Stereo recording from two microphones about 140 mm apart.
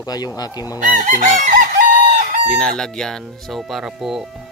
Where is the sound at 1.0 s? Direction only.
65° right (ahead or behind).